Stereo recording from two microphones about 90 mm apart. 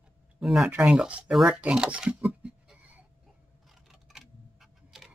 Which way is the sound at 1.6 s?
10° right (ahead or behind).